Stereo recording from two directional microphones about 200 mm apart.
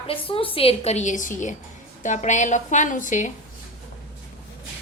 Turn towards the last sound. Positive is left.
turn(degrees=40)  # may be behind; listen again after turning